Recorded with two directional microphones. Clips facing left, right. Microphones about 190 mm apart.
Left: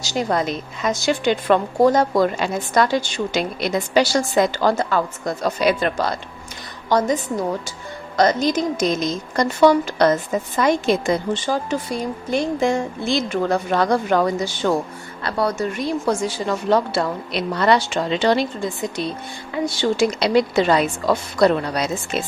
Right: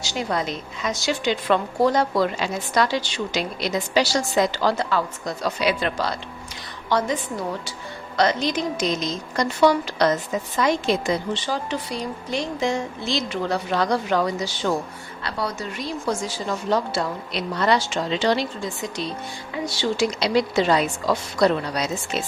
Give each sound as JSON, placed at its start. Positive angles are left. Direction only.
{"t": 0.0, "sound": "a woman's voice", "side_deg": 45}